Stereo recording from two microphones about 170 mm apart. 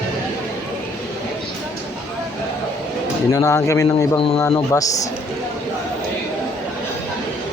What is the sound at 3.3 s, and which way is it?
Speech, 20° left (ahead or behind).